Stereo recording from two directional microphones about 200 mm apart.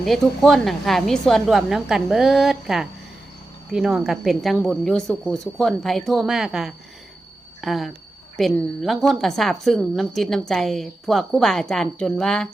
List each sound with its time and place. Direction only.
0.0 s speech: centre (ahead or behind)